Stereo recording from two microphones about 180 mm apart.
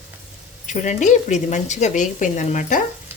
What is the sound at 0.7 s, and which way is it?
Stir, 40° left (ahead or behind).